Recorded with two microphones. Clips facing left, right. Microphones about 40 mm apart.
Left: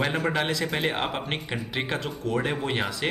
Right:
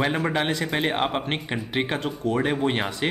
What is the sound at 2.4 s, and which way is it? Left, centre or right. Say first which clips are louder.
Speech: right 3 dB; centre.